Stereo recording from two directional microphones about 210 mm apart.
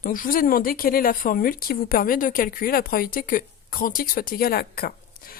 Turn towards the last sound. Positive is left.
turn(degrees=45)  # may be behind; listen again after turning